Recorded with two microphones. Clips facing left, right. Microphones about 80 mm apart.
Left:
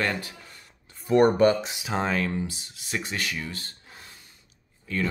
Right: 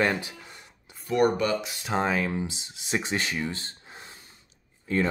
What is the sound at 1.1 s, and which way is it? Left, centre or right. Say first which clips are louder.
Speech: left 5 dB; left.